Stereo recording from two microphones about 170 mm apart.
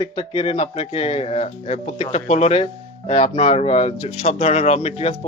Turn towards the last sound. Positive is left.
turn(degrees=40)  # may be behind; listen again after turning